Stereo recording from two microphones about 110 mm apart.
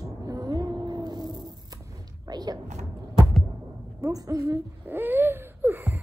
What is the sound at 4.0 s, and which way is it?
Speech, 35° right (ahead or behind).